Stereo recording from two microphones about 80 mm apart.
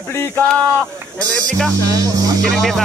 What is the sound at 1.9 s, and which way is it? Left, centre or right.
Speech, right.